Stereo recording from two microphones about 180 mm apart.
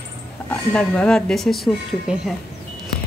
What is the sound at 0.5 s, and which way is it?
Speech, 5° left (ahead or behind).